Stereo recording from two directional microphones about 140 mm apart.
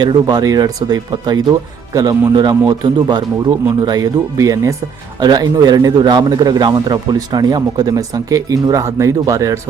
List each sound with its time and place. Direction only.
0.0 s a man's voice: 30° right (ahead or behind)